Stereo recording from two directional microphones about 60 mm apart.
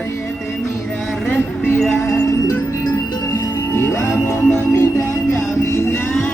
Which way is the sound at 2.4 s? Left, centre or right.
Left.